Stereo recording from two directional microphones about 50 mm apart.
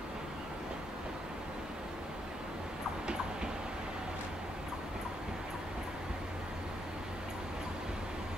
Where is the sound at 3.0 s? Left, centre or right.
Centre.